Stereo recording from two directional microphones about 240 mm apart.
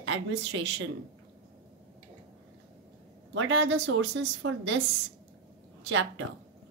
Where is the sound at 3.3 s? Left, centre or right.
Right.